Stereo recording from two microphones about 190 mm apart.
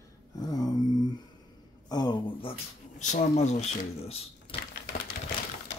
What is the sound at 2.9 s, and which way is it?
Speech, 40° left (ahead or behind).